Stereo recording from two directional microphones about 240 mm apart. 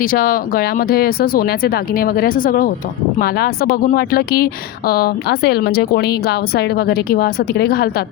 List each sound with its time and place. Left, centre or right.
0.0 s a woman's voice: left